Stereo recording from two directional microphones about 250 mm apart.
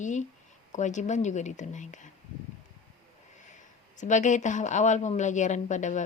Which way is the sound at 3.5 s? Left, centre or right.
Left.